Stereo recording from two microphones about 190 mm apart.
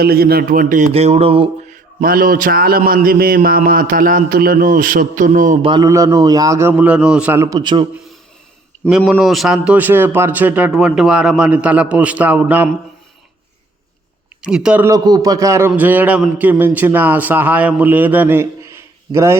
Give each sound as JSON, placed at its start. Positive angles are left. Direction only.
{"t": 0.0, "sound": "a man's voice", "side_deg": -55}
{"t": 1.7, "sound": "a man's voice", "side_deg": -50}
{"t": 5.6, "sound": "a man's voice", "side_deg": -20}
{"t": 8.9, "sound": "a man's voice", "side_deg": -5}
{"t": 14.4, "sound": "a man's voice", "side_deg": -5}